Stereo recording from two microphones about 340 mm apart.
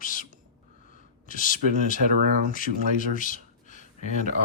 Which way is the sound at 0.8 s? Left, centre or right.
Left.